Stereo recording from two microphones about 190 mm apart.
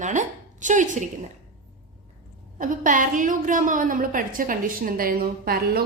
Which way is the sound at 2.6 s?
45° right (ahead or behind).